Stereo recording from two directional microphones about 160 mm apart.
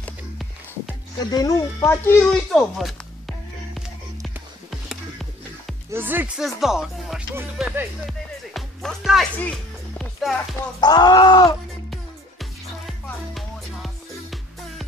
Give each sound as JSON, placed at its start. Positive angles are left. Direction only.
{"t": 1.3, "sound": "speech", "side_deg": 20}
{"t": 2.3, "sound": "music", "side_deg": 0}
{"t": 5.9, "sound": "speech", "side_deg": -10}
{"t": 8.1, "sound": "music", "side_deg": 0}
{"t": 10.8, "sound": "speech", "side_deg": 25}
{"t": 11.9, "sound": "music", "side_deg": 0}